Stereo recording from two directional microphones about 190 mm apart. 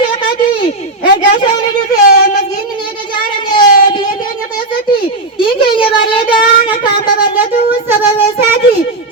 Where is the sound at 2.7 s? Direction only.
25° left (ahead or behind).